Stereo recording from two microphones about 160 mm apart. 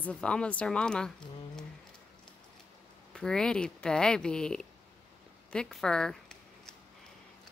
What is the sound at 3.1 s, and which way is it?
Speech, 5° left (ahead or behind).